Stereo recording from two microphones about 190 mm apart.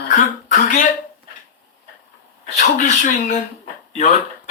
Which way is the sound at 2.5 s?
40° left (ahead or behind).